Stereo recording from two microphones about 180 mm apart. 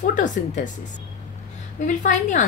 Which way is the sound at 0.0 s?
45° left (ahead or behind).